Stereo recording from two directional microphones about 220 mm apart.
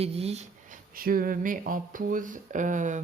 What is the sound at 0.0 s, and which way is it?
Speech, 30° right (ahead or behind).